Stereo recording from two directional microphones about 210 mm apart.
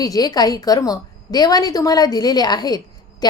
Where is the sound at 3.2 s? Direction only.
20° left (ahead or behind).